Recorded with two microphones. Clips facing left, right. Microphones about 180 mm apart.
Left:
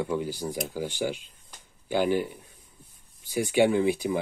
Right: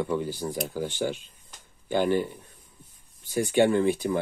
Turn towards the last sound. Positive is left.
turn(degrees=10)  # may be behind; listen again after turning